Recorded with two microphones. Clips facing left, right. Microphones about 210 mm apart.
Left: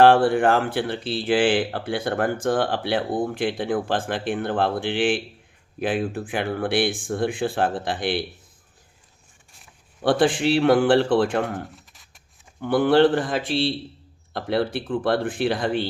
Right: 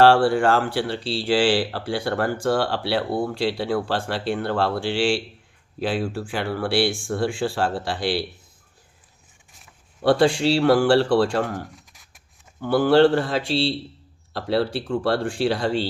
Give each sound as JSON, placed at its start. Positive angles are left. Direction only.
{"t": 0.0, "sound": "speech", "side_deg": 20}
{"t": 10.1, "sound": "speech", "side_deg": 20}
{"t": 12.6, "sound": "speech", "side_deg": 20}